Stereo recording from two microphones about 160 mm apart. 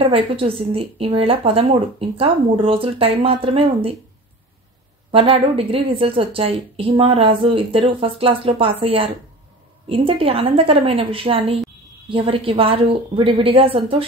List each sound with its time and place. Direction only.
0.0 s a woman's voice: 35° right (ahead or behind)
5.1 s a woman's voice: 35° right (ahead or behind)